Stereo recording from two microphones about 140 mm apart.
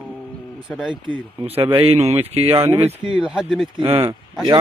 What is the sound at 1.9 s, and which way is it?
Speech, 45° right (ahead or behind).